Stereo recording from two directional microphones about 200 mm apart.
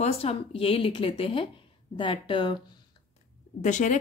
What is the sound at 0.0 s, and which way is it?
Speech, 30° left (ahead or behind).